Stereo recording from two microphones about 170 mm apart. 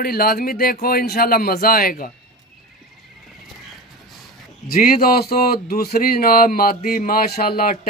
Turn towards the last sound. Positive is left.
turn(degrees=60)  # may be behind; listen again after turning